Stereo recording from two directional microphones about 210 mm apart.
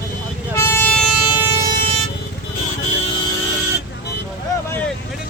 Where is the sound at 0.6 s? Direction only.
10° left (ahead or behind).